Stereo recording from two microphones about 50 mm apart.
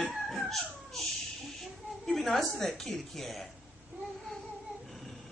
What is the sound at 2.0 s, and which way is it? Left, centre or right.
Speech, centre.